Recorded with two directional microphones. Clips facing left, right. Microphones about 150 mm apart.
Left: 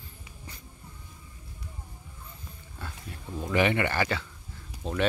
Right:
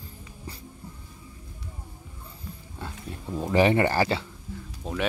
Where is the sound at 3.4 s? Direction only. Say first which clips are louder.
Right 5 dB; 35° right (ahead or behind).